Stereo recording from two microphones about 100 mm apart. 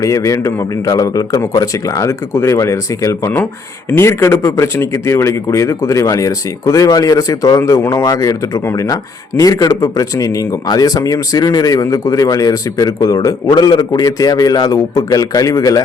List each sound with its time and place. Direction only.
0.0 s speech: 35° left (ahead or behind)